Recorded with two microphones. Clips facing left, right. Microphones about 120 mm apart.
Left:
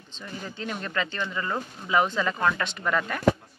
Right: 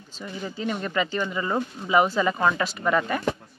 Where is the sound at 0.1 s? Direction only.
10° right (ahead or behind).